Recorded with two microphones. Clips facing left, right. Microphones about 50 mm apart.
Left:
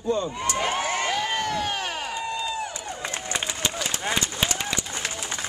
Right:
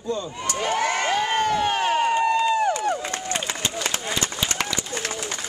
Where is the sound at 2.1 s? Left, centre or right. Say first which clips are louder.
Right 9 dB; right.